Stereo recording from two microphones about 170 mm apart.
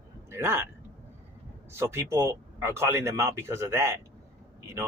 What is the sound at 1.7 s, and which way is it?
A man's voice, 15° right (ahead or behind).